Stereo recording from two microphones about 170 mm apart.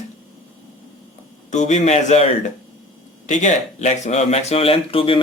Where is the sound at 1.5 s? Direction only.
45° left (ahead or behind).